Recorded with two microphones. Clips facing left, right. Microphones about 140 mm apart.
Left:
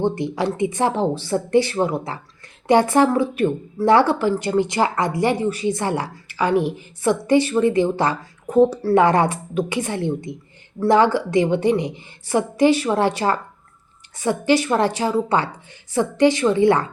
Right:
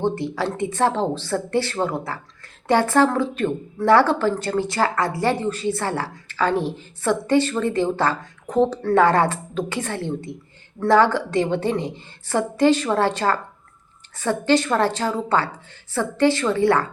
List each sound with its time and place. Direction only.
0.0 s speech: 15° left (ahead or behind)